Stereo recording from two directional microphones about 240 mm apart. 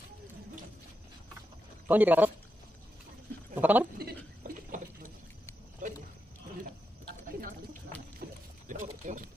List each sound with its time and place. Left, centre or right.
1.9 s a man's voice: centre
3.5 s a man's voice: centre
4.4 s rodents: right
5.8 s a sound: right
8.2 s rowboat: right
8.6 s a sound: right